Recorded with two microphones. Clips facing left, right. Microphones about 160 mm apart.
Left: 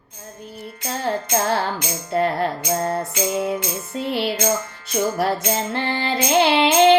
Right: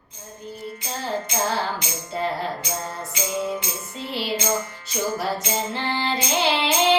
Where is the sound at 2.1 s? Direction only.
60° left (ahead or behind).